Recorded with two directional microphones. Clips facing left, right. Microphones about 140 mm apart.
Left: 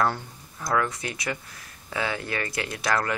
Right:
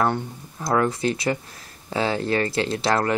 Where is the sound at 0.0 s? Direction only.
25° right (ahead or behind).